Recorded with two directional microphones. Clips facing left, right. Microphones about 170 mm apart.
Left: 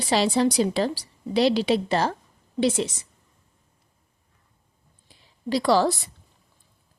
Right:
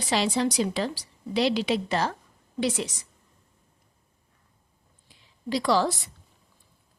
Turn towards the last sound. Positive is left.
turn(degrees=35)  # may be behind; listen again after turning